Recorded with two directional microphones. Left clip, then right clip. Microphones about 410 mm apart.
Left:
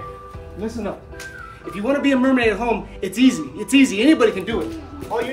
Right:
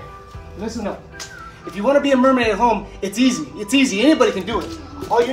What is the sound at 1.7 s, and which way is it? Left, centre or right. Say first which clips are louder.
A man's voice: right 4 dB; centre.